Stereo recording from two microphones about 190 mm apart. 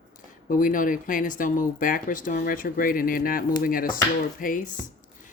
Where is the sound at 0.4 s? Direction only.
45° left (ahead or behind).